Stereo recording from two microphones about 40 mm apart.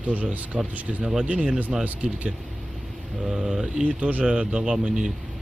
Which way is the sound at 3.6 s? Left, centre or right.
Right.